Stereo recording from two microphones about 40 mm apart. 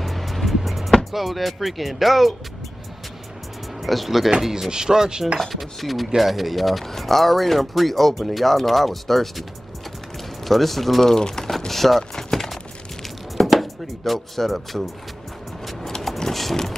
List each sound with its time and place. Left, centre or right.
0.0 s music: centre
3.8 s speech: centre
5.5 s speech: centre
12.0 s a sound: centre
13.4 s speech: centre
16.0 s vehicle: centre